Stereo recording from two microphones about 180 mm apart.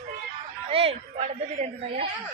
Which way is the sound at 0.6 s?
35° right (ahead or behind).